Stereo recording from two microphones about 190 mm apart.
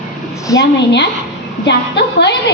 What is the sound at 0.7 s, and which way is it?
Speech, 65° left (ahead or behind).